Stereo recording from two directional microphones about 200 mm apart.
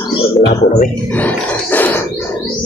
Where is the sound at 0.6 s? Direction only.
50° left (ahead or behind).